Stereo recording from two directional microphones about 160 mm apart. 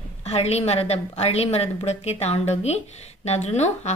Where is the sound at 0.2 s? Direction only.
40° left (ahead or behind).